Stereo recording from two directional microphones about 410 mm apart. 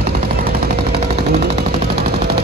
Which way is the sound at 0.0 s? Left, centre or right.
Right.